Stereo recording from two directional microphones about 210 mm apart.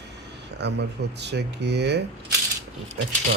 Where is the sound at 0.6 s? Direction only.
55° right (ahead or behind).